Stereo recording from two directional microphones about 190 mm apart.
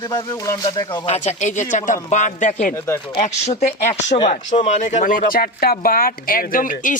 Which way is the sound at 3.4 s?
40° left (ahead or behind).